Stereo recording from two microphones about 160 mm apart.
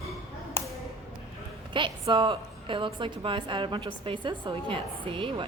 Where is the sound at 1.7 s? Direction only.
30° right (ahead or behind).